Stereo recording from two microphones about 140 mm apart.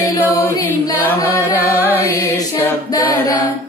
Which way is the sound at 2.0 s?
20° left (ahead or behind).